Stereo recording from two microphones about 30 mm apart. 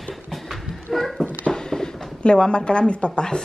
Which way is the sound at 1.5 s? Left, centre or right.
Centre.